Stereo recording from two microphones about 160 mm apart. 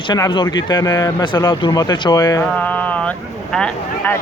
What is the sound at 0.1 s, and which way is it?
Speech, 25° left (ahead or behind).